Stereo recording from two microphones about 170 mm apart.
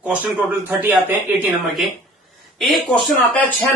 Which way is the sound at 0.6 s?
10° right (ahead or behind).